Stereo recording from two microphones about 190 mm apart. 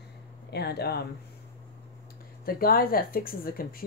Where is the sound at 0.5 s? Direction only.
55° left (ahead or behind).